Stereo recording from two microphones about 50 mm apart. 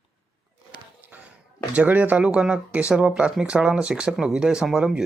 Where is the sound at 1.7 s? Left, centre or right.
Right.